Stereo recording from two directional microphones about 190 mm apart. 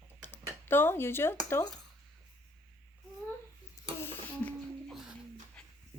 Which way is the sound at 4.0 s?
5° left (ahead or behind).